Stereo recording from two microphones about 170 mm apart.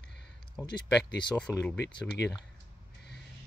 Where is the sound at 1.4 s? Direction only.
5° left (ahead or behind).